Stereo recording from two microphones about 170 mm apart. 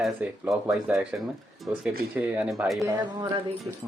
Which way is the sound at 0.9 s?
10° right (ahead or behind).